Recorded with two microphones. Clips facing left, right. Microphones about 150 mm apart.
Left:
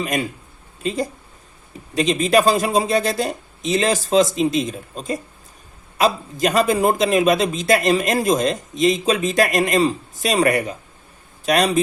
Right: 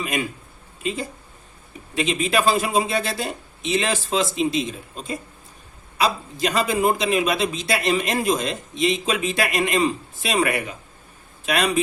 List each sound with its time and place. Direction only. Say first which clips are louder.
0.0 s a man's voice: left 3 dB; 40° left (ahead or behind)